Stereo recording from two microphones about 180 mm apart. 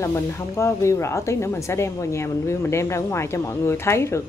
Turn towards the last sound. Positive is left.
turn(degrees=15)  # may be behind; listen again after turning